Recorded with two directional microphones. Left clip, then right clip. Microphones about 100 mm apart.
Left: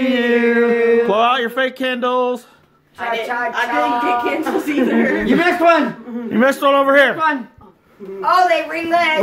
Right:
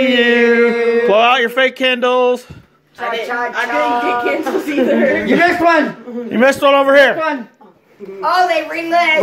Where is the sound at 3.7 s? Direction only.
5° left (ahead or behind).